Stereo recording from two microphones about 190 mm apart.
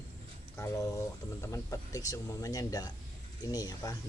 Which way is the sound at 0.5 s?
15° left (ahead or behind).